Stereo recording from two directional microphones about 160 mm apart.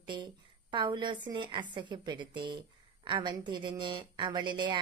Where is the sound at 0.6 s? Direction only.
30° right (ahead or behind).